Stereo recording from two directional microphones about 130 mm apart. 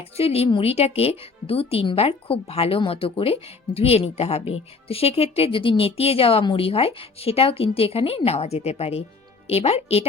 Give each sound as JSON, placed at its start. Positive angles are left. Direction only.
{"t": 0.0, "sound": "speech", "side_deg": 50}